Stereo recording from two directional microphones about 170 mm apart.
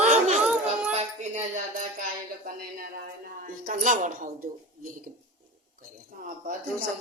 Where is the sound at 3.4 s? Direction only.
55° right (ahead or behind).